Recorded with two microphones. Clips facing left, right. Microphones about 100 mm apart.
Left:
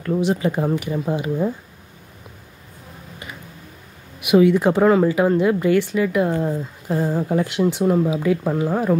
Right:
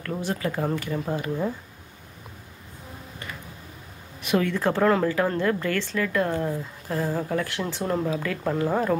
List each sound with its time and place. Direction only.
0.2 s speech: 20° left (ahead or behind)
4.2 s speech: 15° left (ahead or behind)